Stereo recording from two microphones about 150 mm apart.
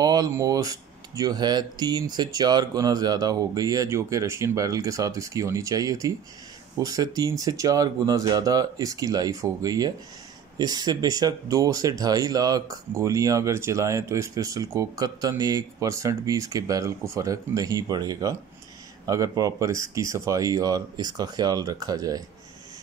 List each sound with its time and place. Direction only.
0.0 s speech: 25° right (ahead or behind)